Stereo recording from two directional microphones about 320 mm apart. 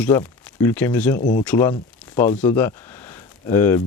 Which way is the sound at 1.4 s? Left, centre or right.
Centre.